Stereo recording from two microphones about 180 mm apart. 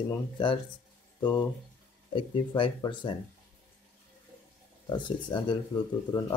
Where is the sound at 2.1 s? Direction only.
30° left (ahead or behind).